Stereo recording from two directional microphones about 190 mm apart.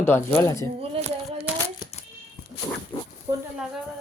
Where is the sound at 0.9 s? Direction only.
30° right (ahead or behind).